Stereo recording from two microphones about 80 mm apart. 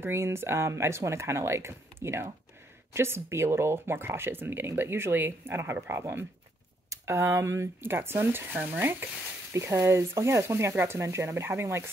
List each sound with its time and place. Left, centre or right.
0.0 s speech: right